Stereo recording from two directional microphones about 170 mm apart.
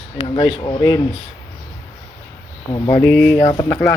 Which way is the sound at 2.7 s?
15° left (ahead or behind).